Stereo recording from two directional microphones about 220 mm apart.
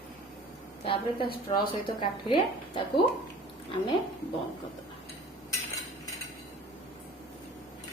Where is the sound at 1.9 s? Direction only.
25° left (ahead or behind).